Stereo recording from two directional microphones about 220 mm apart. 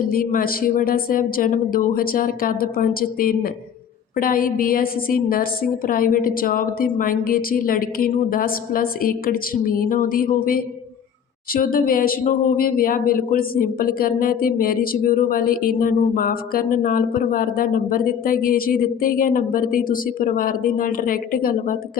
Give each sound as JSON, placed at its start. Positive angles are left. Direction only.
{"t": 0.1, "sound": "speech", "side_deg": 40}